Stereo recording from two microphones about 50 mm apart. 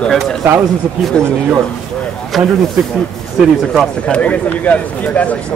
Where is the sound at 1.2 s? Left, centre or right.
Centre.